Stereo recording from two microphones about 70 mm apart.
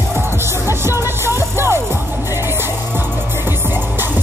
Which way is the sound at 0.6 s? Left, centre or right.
Right.